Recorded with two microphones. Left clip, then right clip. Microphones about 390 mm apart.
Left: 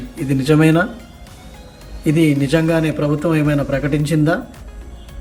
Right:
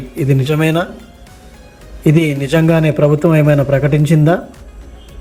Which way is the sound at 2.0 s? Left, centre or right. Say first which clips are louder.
Right 1 dB; centre.